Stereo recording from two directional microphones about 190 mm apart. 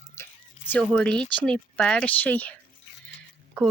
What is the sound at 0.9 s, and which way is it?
Speech, 5° left (ahead or behind).